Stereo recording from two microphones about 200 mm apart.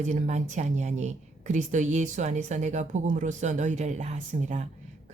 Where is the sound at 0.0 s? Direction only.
35° right (ahead or behind).